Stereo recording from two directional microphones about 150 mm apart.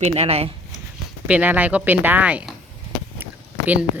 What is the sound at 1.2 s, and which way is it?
Speech, 10° right (ahead or behind).